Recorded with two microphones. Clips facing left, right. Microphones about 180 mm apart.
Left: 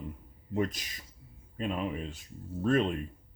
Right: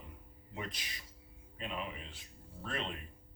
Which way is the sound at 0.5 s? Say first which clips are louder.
Left 13 dB; 45° left (ahead or behind).